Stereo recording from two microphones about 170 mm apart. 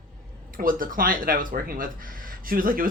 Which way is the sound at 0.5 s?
55° right (ahead or behind).